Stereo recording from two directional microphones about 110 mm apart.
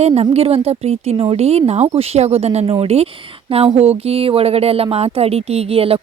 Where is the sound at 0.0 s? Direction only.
75° right (ahead or behind).